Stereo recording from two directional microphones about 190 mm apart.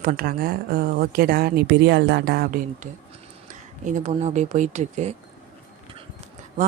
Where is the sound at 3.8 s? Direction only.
40° right (ahead or behind).